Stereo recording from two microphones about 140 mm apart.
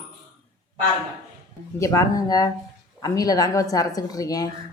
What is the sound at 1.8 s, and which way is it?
Speech, 25° left (ahead or behind).